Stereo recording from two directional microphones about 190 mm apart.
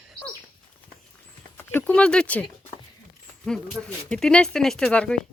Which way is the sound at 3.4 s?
5° left (ahead or behind).